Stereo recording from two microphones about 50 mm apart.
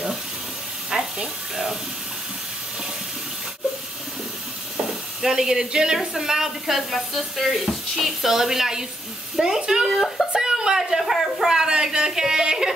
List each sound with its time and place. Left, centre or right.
0.8 s a sound: centre
5.2 s a woman's voice: centre
6.9 s a woman's voice: centre
9.8 s speech: centre
10.3 s a sound: centre
11.4 s a woman's voice: centre